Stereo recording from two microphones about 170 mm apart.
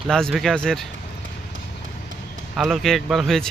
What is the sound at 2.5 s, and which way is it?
Speech, centre (ahead or behind).